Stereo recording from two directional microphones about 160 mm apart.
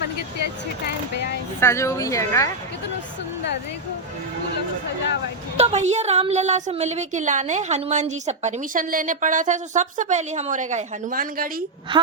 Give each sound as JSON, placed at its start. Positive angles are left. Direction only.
{"t": 0.9, "sound": "vehicle", "side_deg": 90}
{"t": 1.6, "sound": "speech", "side_deg": 20}
{"t": 5.5, "sound": "a woman's voice", "side_deg": -40}